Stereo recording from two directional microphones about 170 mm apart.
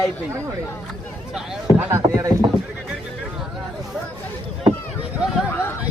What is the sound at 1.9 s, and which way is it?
Speech, 15° right (ahead or behind).